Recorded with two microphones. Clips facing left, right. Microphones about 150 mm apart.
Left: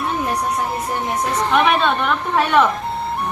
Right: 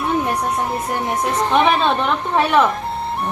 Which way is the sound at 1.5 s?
30° right (ahead or behind).